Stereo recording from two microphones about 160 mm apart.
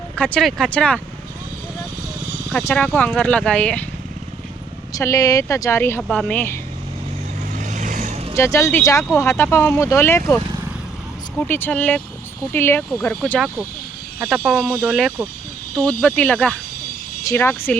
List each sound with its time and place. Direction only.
0.2 s speech: 5° left (ahead or behind)
2.5 s speech: 10° left (ahead or behind)
4.9 s speech: 20° left (ahead or behind)
7.5 s vehicle: 50° right (ahead or behind)
8.4 s speech: 20° left (ahead or behind)
14.2 s speech: 5° right (ahead or behind); by 17.7 s 15° left (ahead or behind)